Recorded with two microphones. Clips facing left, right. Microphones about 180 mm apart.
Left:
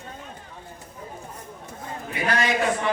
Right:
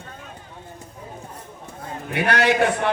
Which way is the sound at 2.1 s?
70° right (ahead or behind).